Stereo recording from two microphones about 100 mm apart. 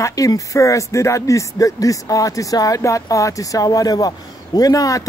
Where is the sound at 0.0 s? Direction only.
35° left (ahead or behind).